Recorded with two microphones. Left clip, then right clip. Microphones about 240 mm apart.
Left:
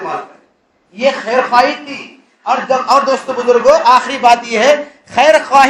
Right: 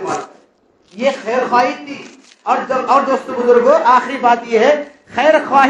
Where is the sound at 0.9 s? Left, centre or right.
Left.